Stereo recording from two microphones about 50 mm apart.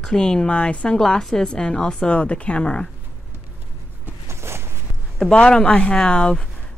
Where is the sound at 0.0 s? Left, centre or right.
Centre.